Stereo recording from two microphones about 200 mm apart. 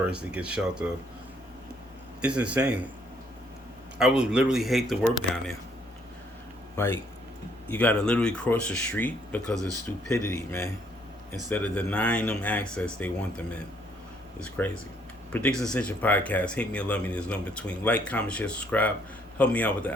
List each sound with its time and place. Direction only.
0.0 s speech: 5° right (ahead or behind)
2.2 s speech: 5° right (ahead or behind)
3.9 s speech: 5° right (ahead or behind)
6.7 s speech: 10° left (ahead or behind)
9.6 s speech: 20° right (ahead or behind)
9.8 s speech: 15° left (ahead or behind)